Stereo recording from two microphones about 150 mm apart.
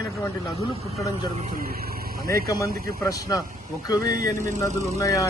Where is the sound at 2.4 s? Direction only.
20° left (ahead or behind).